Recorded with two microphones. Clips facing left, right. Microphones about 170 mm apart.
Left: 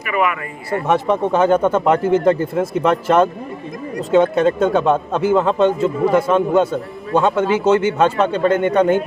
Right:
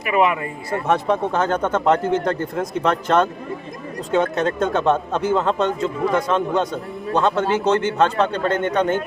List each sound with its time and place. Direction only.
0.7 s speech: 5° left (ahead or behind)